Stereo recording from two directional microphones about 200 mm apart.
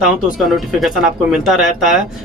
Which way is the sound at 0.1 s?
Centre (ahead or behind).